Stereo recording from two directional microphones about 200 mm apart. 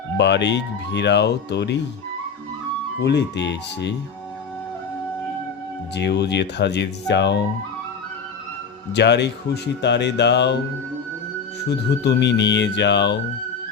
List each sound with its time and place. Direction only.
0.2 s speech: 60° left (ahead or behind)
3.0 s speech: 60° left (ahead or behind)
5.9 s speech: 60° left (ahead or behind)
8.9 s speech: 60° left (ahead or behind)
11.7 s speech: 55° left (ahead or behind)